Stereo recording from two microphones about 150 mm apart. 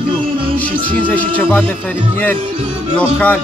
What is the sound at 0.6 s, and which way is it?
Speech, 10° left (ahead or behind).